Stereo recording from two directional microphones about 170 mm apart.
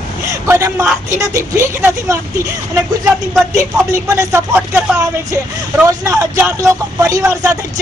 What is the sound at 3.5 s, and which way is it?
Speech, 15° right (ahead or behind).